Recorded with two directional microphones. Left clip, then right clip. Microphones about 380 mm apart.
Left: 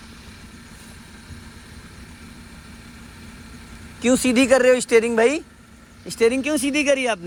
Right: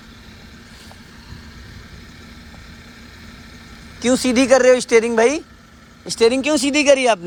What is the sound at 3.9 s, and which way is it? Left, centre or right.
Speech, centre.